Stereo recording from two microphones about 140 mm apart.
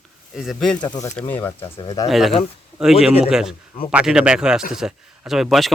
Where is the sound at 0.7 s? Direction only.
30° left (ahead or behind).